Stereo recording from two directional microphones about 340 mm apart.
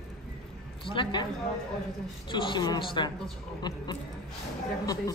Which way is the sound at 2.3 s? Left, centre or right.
Centre.